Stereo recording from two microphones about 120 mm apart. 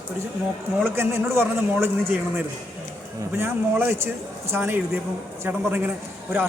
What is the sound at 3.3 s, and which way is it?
A man's voice, 20° right (ahead or behind).